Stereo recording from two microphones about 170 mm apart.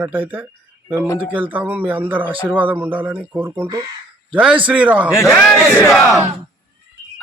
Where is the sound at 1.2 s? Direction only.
10° right (ahead or behind).